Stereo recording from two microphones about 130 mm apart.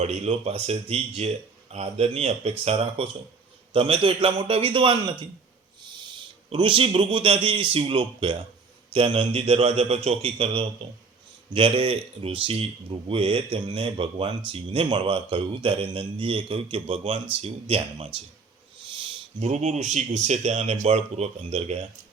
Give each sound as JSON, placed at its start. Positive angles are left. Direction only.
{"t": 0.0, "sound": "speech", "side_deg": -55}
{"t": 19.4, "sound": "speech", "side_deg": -60}